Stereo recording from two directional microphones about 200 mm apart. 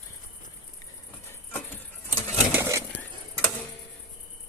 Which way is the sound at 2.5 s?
15° right (ahead or behind).